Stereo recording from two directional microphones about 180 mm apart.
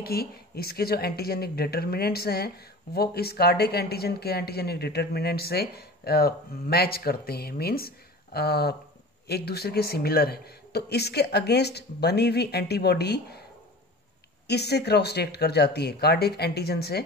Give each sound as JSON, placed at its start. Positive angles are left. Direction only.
{"t": 0.0, "sound": "speech", "side_deg": 60}
{"t": 14.5, "sound": "speech", "side_deg": 65}